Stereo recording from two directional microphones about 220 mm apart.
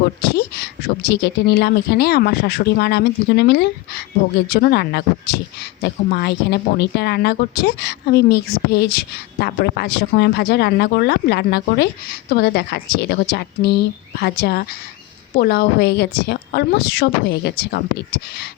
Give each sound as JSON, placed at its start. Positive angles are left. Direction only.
{"t": 0.3, "sound": "speech", "side_deg": 45}